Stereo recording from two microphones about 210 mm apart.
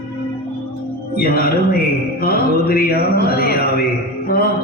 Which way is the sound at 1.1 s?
45° left (ahead or behind).